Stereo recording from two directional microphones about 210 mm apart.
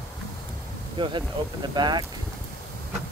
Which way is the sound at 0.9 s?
25° right (ahead or behind).